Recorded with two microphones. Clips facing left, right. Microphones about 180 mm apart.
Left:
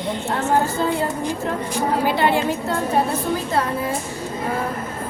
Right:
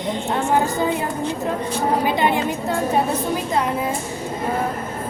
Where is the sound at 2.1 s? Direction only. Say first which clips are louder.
Left 1 dB; 20° right (ahead or behind).